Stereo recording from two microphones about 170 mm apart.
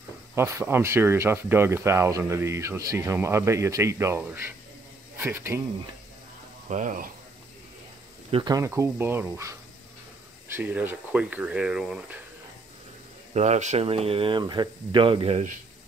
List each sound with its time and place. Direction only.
0.3 s speech: 15° right (ahead or behind)
6.7 s speech: 50° right (ahead or behind)
8.3 s speech: 25° right (ahead or behind); by 12.2 s 5° right (ahead or behind)
13.3 s speech: 40° right (ahead or behind)